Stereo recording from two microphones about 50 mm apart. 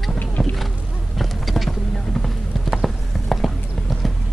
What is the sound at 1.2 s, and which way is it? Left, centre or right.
Insect, centre.